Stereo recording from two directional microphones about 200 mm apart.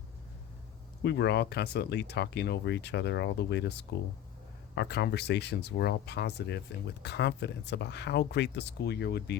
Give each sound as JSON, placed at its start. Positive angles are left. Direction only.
{"t": 1.0, "sound": "speech", "side_deg": 60}